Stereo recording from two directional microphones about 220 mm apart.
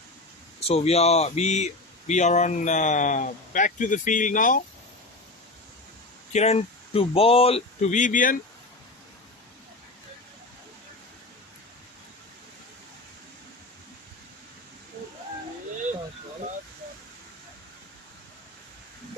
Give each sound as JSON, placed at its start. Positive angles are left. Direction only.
{"t": 0.7, "sound": "speech", "side_deg": 30}
{"t": 6.3, "sound": "speech", "side_deg": 30}